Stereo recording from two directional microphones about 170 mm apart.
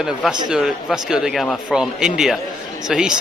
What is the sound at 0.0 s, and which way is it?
Speech, 5° right (ahead or behind).